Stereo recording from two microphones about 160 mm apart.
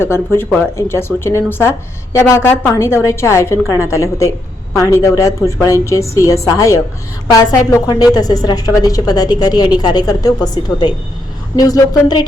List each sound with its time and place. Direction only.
0.0 s a woman's voice: 15° left (ahead or behind)